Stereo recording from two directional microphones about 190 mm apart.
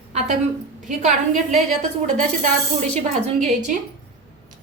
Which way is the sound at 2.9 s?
35° right (ahead or behind).